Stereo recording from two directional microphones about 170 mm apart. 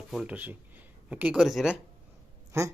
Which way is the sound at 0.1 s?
5° right (ahead or behind).